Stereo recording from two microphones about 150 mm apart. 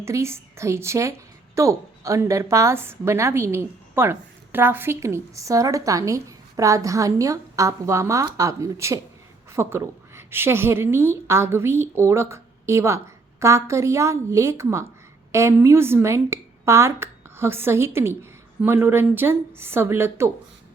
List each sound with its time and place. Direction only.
0.0 s a woman's voice: 20° right (ahead or behind)